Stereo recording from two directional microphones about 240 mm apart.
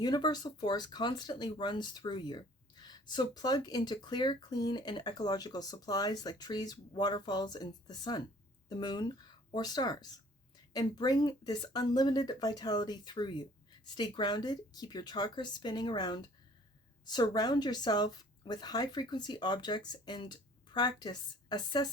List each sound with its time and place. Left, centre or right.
0.0 s speech: centre